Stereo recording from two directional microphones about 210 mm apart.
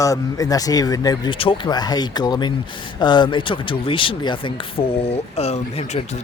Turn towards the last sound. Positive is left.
turn(degrees=30)  # may be behind; listen again after turning